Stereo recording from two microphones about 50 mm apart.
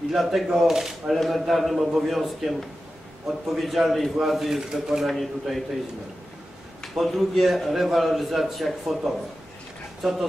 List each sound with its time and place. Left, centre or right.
0.1 s a man's voice: centre
5.0 s a man's voice: centre
6.8 s a man's voice: centre